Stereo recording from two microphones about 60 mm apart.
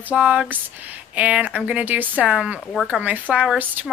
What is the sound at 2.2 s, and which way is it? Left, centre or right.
Speech, centre.